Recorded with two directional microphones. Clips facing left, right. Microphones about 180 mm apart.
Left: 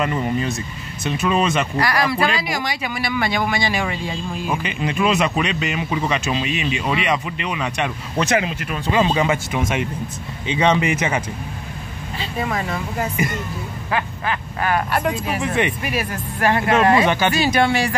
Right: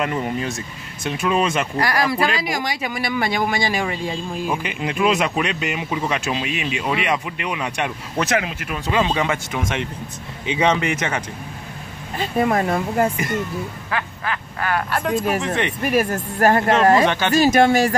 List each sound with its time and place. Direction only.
0.0 s speech: 10° right (ahead or behind)
1.8 s speech: 45° right (ahead or behind)
4.5 s speech: 10° right (ahead or behind); by 9.8 s 5° left (ahead or behind)
10.4 s speech: 5° right (ahead or behind)
12.2 s speech: 50° right (ahead or behind)
13.8 s speech: 20° left (ahead or behind)
15.8 s speech: 45° right (ahead or behind)
17.0 s speech: 10° left (ahead or behind)
17.3 s speech: 45° right (ahead or behind)